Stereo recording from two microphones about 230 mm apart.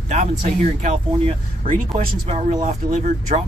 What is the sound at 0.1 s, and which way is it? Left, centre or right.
Speech, right.